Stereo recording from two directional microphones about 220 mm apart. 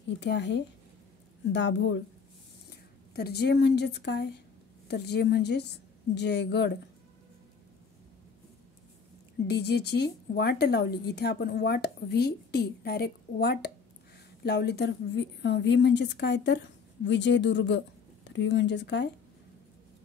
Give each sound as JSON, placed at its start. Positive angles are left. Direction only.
{"t": 0.2, "sound": "a woman's voice", "side_deg": 55}
{"t": 3.2, "sound": "a woman's voice", "side_deg": 45}
{"t": 9.5, "sound": "a woman's voice", "side_deg": 50}